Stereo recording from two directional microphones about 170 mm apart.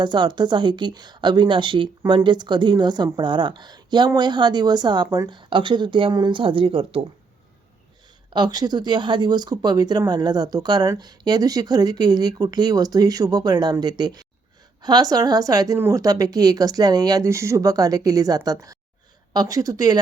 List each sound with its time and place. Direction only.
0.0 s speech: 25° right (ahead or behind)
8.3 s speech: 25° right (ahead or behind)